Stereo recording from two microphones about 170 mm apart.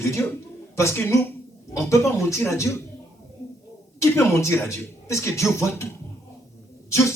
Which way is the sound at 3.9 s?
15° left (ahead or behind).